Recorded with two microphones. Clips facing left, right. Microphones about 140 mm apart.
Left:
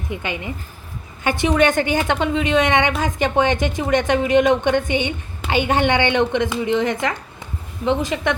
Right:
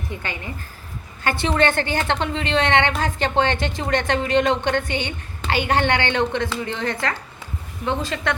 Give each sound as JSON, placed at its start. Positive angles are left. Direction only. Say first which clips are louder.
{"t": 0.1, "sound": "a woman's voice", "louder": "left 7 dB", "side_deg": 15}